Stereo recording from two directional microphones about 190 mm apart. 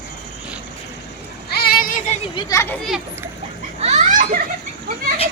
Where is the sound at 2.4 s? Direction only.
20° left (ahead or behind).